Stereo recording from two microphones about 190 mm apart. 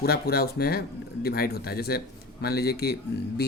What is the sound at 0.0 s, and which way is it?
Speech, 55° left (ahead or behind).